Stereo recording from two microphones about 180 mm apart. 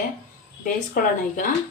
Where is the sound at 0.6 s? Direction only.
50° left (ahead or behind).